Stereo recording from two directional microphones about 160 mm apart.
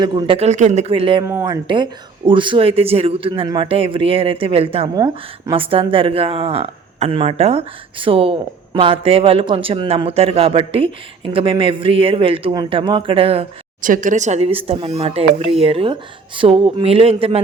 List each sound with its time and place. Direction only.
0.0 s speech: 25° right (ahead or behind)
0.3 s speech: 45° right (ahead or behind)
1.2 s speech: 15° right (ahead or behind)
1.6 s speech: 30° right (ahead or behind)
13.8 s speech: 55° right (ahead or behind); by 17.4 s 35° right (ahead or behind)